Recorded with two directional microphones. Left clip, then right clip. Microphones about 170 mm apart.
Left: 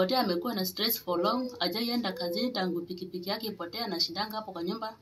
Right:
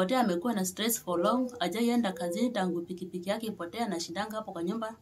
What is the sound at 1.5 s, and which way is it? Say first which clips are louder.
Speech: right 1 dB; 40° right (ahead or behind).